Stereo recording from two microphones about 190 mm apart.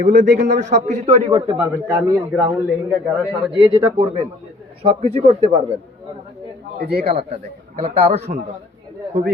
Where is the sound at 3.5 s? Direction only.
25° right (ahead or behind).